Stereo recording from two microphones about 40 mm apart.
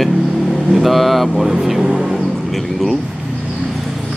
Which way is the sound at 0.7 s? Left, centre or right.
Centre.